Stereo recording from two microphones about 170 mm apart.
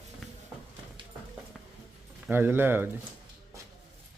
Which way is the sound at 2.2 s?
10° right (ahead or behind).